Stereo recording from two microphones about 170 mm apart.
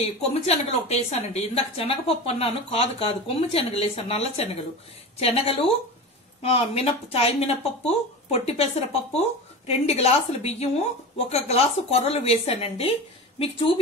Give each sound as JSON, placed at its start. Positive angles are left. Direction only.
{"t": 0.0, "sound": "a woman's voice", "side_deg": 40}
{"t": 9.7, "sound": "a woman's voice", "side_deg": 40}